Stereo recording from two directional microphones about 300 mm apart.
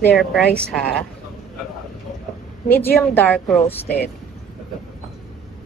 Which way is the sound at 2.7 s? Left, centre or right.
Centre.